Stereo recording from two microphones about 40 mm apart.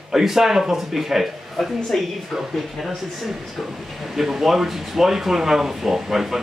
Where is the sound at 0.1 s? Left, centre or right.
Centre.